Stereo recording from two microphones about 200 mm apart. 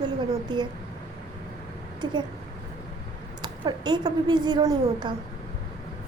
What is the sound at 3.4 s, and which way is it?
A woman's voice, 20° right (ahead or behind).